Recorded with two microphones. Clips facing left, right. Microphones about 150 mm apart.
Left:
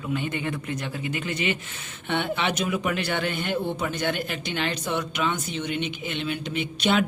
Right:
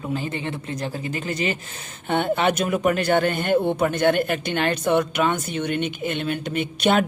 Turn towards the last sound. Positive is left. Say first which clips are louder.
# right 3 dB
turn(degrees=-50)  # may be behind; listen again after turning